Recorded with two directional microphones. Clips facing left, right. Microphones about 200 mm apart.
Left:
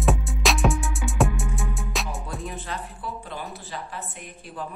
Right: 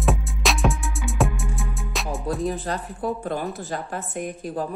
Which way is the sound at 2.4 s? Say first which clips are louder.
Right 7 dB; 40° right (ahead or behind).